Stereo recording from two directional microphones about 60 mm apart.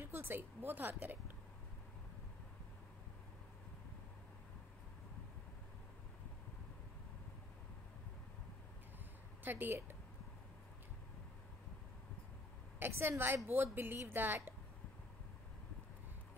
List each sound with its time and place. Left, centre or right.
0.0 s a woman's voice: right
9.4 s a woman's voice: right
12.9 s a woman's voice: right
13.2 s a woman's voice: right